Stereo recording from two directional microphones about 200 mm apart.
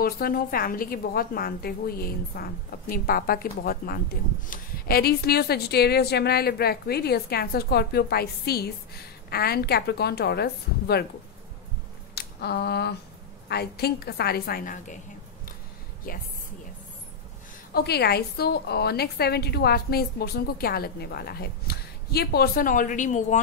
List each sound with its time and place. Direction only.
0.0 s a woman's voice: 50° left (ahead or behind)
12.2 s a sound: 55° left (ahead or behind)
13.5 s a woman's voice: 55° left (ahead or behind)
16.1 s a woman's voice: 45° left (ahead or behind)
17.7 s a woman's voice: 55° left (ahead or behind); by 23.4 s 40° left (ahead or behind)